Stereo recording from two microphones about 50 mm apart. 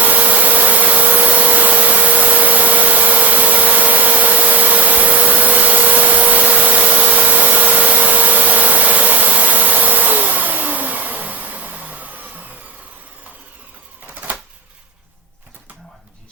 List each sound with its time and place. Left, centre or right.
0.0 s vacuum cleaner: right